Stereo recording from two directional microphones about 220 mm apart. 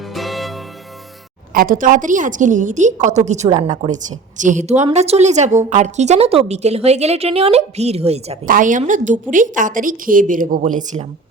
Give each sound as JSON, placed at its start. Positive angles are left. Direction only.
{"t": 0.0, "sound": "music", "side_deg": 0}
{"t": 1.5, "sound": "a woman's voice", "side_deg": -40}